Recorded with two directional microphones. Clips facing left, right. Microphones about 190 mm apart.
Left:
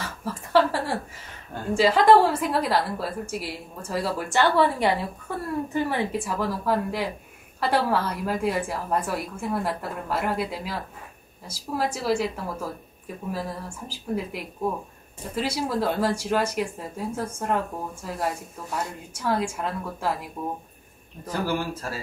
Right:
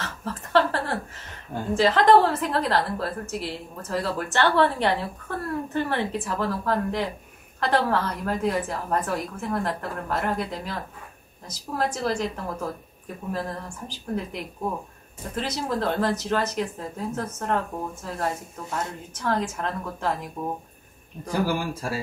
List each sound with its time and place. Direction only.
0.0 s a sound: 10° left (ahead or behind)
1.7 s a woman's voice: 10° left (ahead or behind)
13.3 s a woman's voice: 10° left (ahead or behind)
21.3 s speech: 10° right (ahead or behind)